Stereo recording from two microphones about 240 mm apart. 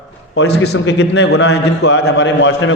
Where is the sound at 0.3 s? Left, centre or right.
Left.